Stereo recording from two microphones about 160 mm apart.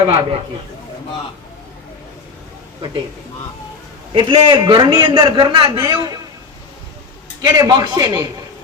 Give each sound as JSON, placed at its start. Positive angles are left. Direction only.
{"t": 0.0, "sound": "a man's voice", "side_deg": -30}
{"t": 4.1, "sound": "a man's voice", "side_deg": -30}
{"t": 7.4, "sound": "a man's voice", "side_deg": -25}